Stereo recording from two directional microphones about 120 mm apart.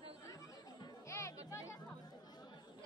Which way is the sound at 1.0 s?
25° left (ahead or behind).